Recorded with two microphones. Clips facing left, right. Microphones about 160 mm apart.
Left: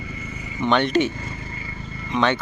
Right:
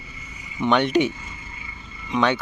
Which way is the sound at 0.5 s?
10° right (ahead or behind).